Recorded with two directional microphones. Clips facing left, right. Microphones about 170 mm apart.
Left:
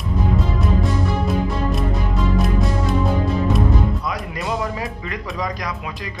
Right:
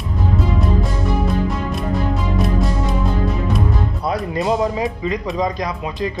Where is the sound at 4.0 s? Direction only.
30° right (ahead or behind).